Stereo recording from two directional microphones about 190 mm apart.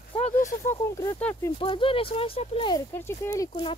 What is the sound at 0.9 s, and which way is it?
Speech, 15° left (ahead or behind).